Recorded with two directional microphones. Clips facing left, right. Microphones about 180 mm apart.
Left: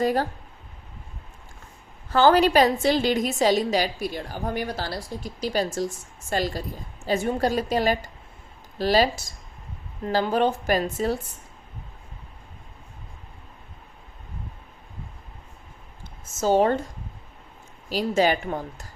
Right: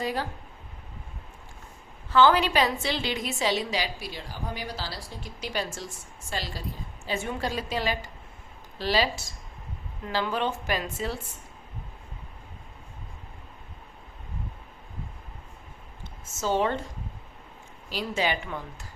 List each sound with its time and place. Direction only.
0.0 s a woman's voice: 45° left (ahead or behind)
2.0 s a woman's voice: 45° left (ahead or behind)
10.1 s a woman's voice: 40° left (ahead or behind)
16.4 s a woman's voice: 40° left (ahead or behind)
17.8 s speech: 40° left (ahead or behind)